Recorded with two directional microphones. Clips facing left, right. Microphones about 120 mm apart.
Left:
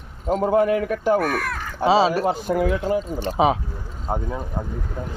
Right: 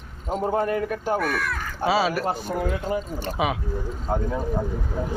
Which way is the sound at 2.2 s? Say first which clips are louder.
Left 5 dB; 80° left.